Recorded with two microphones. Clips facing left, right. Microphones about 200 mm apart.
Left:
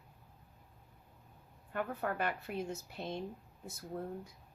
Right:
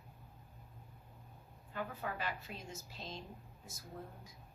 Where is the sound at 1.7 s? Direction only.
55° left (ahead or behind).